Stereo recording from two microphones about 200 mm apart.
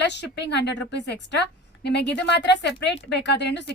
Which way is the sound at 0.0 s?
60° left (ahead or behind).